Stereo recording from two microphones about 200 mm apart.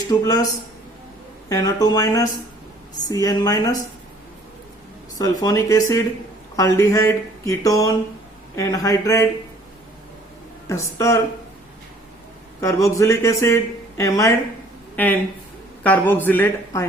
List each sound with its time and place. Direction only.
0.1 s speech: 15° left (ahead or behind)
1.5 s speech: 20° left (ahead or behind)
5.1 s speech: 20° left (ahead or behind)
10.7 s speech: 15° left (ahead or behind)
12.5 s speech: 15° left (ahead or behind)